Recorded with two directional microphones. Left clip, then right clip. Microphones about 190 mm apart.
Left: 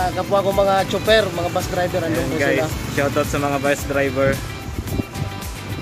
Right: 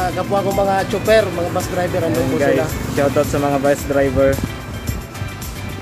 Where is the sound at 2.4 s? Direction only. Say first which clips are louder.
Right 1 dB; 5° right (ahead or behind).